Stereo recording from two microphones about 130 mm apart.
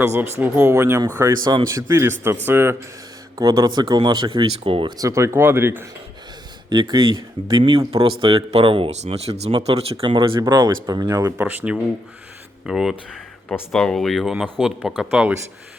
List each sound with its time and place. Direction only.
0.0 s speech: 20° right (ahead or behind); by 4.9 s 40° right (ahead or behind)
4.9 s speech: 25° right (ahead or behind)
6.7 s speech: 35° right (ahead or behind)
11.3 s speech: 15° right (ahead or behind)